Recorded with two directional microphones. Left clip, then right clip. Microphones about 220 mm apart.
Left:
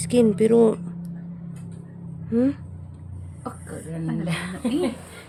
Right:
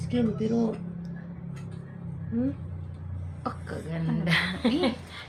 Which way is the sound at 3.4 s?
20° left (ahead or behind).